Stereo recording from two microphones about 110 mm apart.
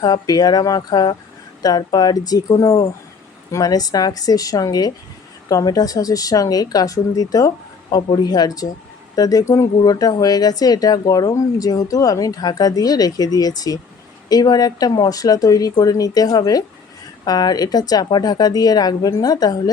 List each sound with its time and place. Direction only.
0.0 s speech: 35° left (ahead or behind)